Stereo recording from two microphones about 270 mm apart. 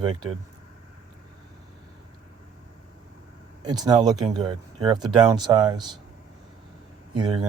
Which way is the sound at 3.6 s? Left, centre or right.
Centre.